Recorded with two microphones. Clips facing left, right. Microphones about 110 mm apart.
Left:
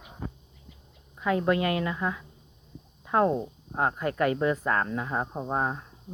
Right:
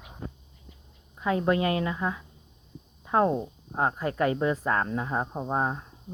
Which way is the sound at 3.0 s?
20° right (ahead or behind).